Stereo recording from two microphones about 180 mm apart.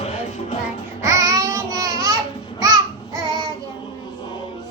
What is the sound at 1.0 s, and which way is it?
Babbling, 20° right (ahead or behind).